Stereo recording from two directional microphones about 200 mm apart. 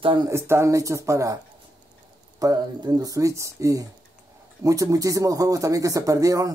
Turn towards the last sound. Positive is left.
turn(degrees=-15)  # may be behind; listen again after turning